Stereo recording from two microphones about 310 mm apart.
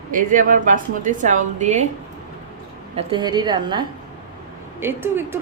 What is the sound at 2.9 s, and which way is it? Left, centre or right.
A woman's voice, centre.